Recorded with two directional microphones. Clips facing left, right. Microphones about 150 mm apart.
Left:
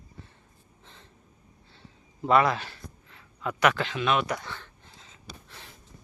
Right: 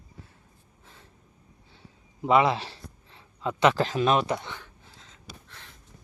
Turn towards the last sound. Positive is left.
turn(degrees=5)  # may be behind; listen again after turning